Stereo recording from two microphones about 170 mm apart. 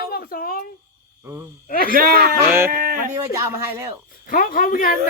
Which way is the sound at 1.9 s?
60° right (ahead or behind).